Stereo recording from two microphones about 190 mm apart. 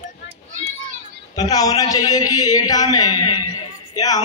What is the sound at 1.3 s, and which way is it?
A man's voice, 20° left (ahead or behind).